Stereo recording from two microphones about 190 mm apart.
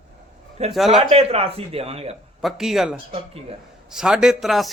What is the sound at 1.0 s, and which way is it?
Speech, 30° right (ahead or behind).